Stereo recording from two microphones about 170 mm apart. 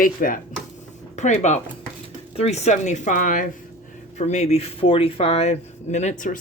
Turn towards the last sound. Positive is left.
turn(degrees=45)  # may be behind; listen again after turning